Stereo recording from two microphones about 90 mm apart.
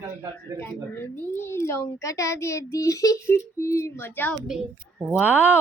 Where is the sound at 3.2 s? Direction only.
30° left (ahead or behind).